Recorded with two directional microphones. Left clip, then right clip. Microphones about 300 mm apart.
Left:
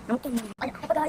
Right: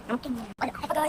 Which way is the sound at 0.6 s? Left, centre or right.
Centre.